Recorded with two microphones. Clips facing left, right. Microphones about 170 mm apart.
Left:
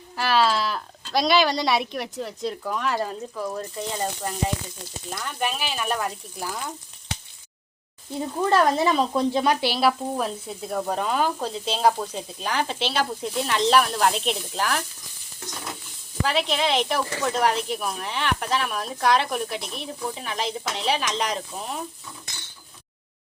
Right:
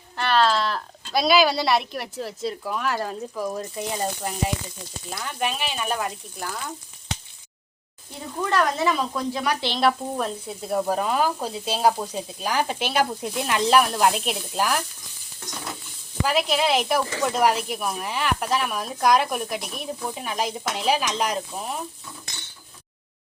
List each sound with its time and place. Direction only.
0.2 s speech: 5° left (ahead or behind)
3.3 s speech: 10° right (ahead or behind)
5.1 s speech: centre (ahead or behind)
8.4 s speech: 30° left (ahead or behind)
9.6 s speech: 10° left (ahead or behind); by 14.8 s 10° right (ahead or behind)
16.2 s speech: 5° right (ahead or behind)